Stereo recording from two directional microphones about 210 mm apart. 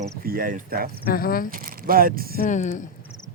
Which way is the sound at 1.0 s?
45° left (ahead or behind).